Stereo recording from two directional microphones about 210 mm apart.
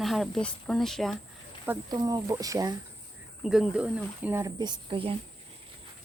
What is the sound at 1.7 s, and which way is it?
Speech, 10° right (ahead or behind).